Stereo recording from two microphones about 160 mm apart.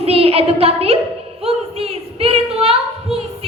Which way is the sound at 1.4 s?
40° right (ahead or behind).